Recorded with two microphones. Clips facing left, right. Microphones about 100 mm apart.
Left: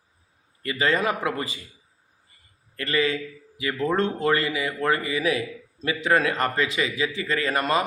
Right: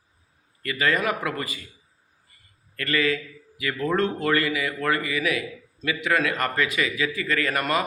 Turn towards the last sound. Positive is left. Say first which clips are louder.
# left 1 dB
turn(degrees=25)  # may be behind; listen again after turning